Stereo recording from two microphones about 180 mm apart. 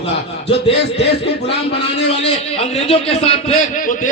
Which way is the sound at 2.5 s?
35° left (ahead or behind).